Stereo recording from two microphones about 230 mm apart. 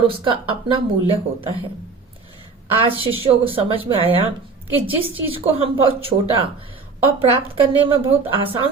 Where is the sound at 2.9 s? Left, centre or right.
Right.